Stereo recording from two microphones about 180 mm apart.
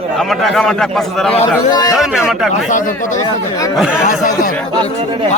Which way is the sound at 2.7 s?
45° left (ahead or behind).